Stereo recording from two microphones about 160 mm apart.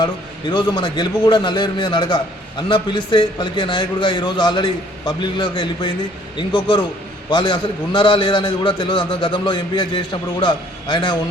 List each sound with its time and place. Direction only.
0.5 s a man's voice: 30° left (ahead or behind)